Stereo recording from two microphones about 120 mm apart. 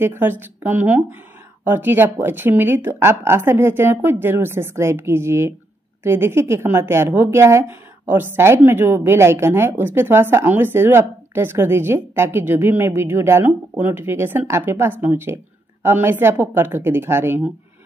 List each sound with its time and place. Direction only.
0.0 s a woman's voice: 20° right (ahead or behind)